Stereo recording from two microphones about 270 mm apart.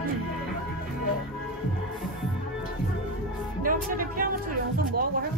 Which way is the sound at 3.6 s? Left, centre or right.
Right.